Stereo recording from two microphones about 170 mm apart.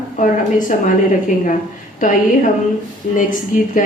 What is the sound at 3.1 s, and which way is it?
Speech, 50° left (ahead or behind).